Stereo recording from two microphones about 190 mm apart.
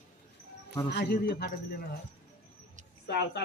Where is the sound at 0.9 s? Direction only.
60° left (ahead or behind).